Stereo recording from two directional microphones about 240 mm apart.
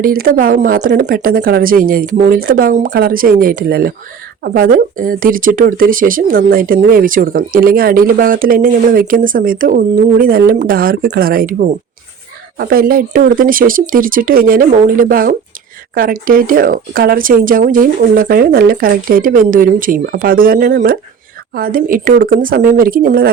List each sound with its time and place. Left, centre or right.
0.0 s speech: right